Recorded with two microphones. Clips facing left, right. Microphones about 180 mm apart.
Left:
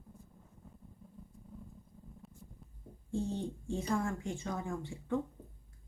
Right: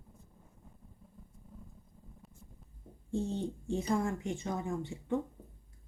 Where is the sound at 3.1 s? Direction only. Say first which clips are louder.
Right 2 dB; 20° right (ahead or behind).